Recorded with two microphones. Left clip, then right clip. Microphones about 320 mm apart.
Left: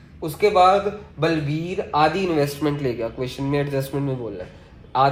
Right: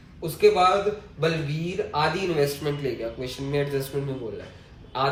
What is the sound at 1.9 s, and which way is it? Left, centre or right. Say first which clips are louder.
Speech: left 7 dB; centre.